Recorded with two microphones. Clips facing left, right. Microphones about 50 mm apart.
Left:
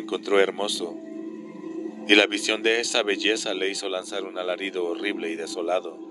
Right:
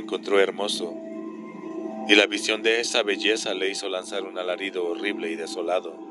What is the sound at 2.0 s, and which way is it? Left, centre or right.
Speech, centre.